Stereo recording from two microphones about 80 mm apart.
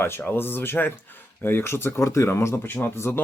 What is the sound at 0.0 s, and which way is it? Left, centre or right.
Speech, left.